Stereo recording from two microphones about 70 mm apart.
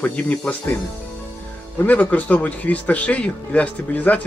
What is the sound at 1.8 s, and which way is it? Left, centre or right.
Speech, left.